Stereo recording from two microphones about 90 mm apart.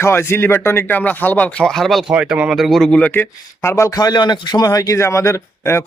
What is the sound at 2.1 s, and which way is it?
Speech, 10° right (ahead or behind).